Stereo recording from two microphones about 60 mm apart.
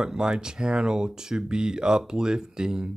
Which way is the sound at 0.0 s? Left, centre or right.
Centre.